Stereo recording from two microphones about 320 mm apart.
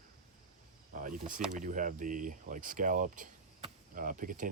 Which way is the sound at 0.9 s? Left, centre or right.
Right.